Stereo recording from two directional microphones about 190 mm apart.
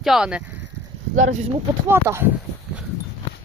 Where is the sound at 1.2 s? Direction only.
40° right (ahead or behind).